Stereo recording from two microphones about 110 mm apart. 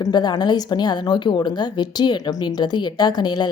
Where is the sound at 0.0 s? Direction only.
40° left (ahead or behind).